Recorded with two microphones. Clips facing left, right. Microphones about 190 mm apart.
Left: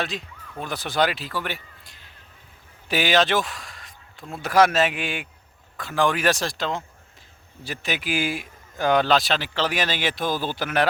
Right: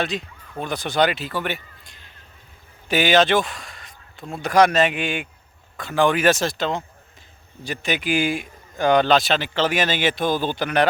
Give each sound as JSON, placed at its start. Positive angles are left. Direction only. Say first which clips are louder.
{"t": 0.0, "sound": "a man's voice", "louder": "right 4 dB", "side_deg": 0}